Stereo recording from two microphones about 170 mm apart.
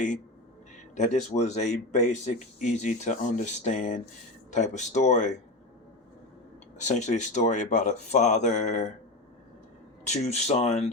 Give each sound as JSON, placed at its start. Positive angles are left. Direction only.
{"t": 0.9, "sound": "speech", "side_deg": 45}
{"t": 6.7, "sound": "speech", "side_deg": 45}
{"t": 10.0, "sound": "speech", "side_deg": 40}